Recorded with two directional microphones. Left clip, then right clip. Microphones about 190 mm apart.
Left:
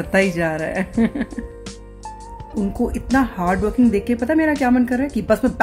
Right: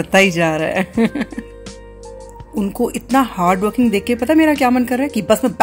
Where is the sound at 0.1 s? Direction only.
15° right (ahead or behind).